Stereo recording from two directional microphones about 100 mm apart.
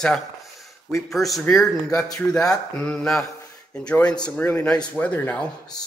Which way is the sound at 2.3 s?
10° left (ahead or behind).